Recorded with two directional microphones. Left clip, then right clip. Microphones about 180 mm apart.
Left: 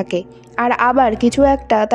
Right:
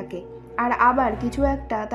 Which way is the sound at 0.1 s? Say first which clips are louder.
Left 10 dB; 50° left (ahead or behind).